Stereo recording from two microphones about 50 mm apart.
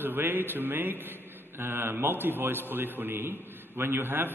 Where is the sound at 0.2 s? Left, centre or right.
Right.